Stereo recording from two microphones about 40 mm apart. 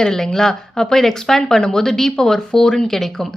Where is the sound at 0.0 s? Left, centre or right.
Centre.